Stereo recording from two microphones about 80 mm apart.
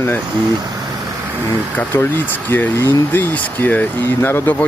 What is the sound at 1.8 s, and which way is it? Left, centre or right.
Speech, left.